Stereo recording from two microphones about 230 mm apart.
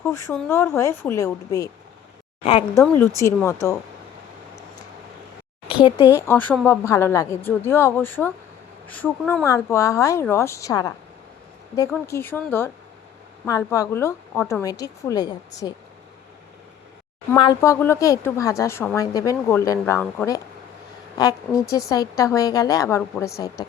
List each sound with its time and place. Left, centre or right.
0.3 s a woman's voice: centre
2.7 s a woman's voice: centre
6.1 s a woman's voice: centre
17.3 s a woman's voice: centre